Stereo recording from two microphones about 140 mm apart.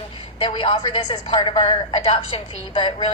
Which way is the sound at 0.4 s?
40° left (ahead or behind).